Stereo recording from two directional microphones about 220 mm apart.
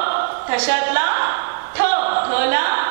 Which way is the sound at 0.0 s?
15° right (ahead or behind).